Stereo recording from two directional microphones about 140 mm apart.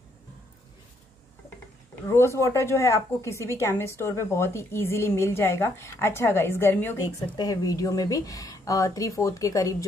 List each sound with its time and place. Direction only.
2.0 s a woman's voice: 20° left (ahead or behind)